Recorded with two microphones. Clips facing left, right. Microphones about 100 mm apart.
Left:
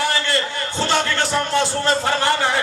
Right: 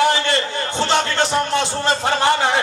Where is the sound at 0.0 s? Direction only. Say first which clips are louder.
Right 4 dB; 20° right (ahead or behind).